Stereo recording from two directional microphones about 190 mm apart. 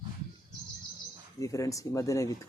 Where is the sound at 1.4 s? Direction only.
15° left (ahead or behind).